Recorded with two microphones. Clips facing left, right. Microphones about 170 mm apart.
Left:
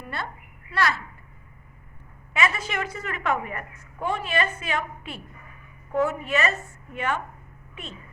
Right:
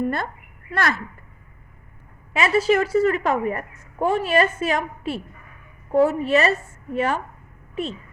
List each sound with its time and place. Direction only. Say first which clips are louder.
0.0 s a child's voice: right 10 dB; 50° right (ahead or behind)
2.3 s a woman's voice: right 8 dB; 35° right (ahead or behind)